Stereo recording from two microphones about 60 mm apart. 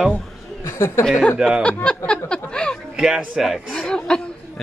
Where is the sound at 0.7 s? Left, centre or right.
Left.